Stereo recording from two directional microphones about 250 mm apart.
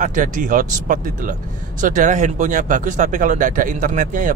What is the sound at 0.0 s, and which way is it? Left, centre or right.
Speech, right.